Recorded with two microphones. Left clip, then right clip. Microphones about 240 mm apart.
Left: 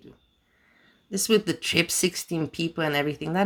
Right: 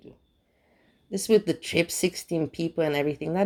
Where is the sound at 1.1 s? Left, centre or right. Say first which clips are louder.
Right 1 dB; centre.